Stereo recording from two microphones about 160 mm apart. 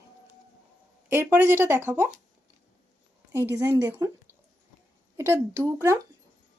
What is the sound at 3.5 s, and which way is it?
Speech, 15° right (ahead or behind).